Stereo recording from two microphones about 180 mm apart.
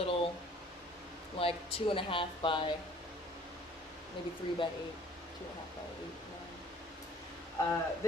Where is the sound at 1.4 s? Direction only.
30° left (ahead or behind).